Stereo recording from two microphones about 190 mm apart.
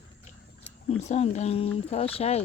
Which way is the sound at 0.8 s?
35° left (ahead or behind).